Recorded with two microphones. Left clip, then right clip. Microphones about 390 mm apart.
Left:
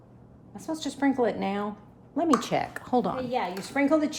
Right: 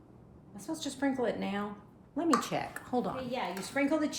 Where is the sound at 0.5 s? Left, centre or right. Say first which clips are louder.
Left 5 dB; centre.